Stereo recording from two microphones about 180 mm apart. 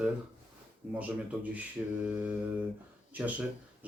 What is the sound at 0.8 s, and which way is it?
Speech, 5° right (ahead or behind).